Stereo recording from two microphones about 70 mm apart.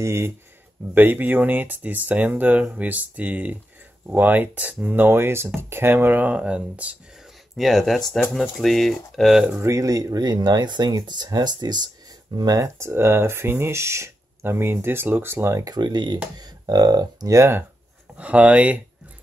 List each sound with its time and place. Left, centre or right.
0.0 s speech: right; by 6.9 s centre
7.5 s speech: centre
9.6 s speech: right
12.4 s speech: right
12.6 s speech: right
15.6 s speech: right
16.3 s speech: right
17.4 s speech: right
18.1 s speech: centre